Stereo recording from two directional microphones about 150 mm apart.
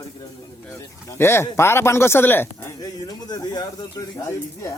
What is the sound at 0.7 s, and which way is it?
Speech, 20° left (ahead or behind).